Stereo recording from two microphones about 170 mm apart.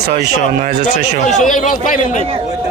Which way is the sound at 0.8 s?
45° left (ahead or behind).